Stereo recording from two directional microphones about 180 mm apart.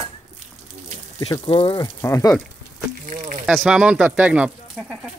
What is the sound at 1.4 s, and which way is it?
Speech, 30° left (ahead or behind).